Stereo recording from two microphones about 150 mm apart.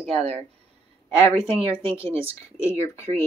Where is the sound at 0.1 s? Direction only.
40° right (ahead or behind).